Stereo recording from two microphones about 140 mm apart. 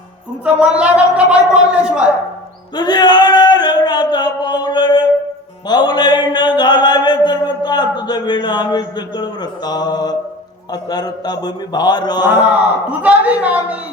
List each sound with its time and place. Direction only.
0.6 s speech: 10° right (ahead or behind)
2.7 s a sound: 30° left (ahead or behind)
5.6 s mantra: 30° left (ahead or behind)
10.7 s a man's voice: 30° left (ahead or behind)
12.9 s a woman's voice: 10° right (ahead or behind)